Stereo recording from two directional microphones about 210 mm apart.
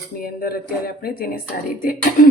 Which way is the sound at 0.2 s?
45° left (ahead or behind).